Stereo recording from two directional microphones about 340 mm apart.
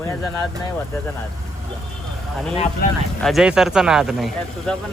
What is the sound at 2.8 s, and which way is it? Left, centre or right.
Speech, left.